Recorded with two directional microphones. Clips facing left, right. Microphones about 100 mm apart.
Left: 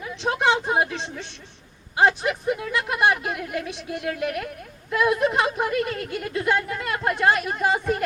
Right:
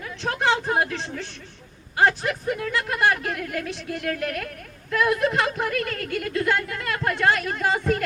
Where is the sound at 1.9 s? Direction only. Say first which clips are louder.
Left 1 dB; 20° left (ahead or behind).